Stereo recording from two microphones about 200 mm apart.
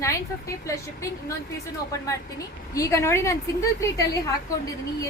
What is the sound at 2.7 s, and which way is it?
A woman's voice, 15° left (ahead or behind).